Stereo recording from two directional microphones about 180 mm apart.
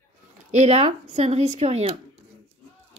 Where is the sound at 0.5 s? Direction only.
40° right (ahead or behind).